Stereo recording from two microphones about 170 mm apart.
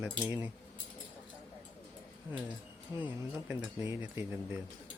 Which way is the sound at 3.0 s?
10° right (ahead or behind).